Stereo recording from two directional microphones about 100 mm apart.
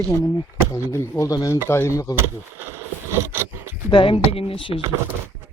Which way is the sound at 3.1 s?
25° right (ahead or behind).